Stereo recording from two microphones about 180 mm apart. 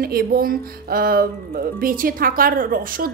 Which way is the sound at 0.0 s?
55° right (ahead or behind).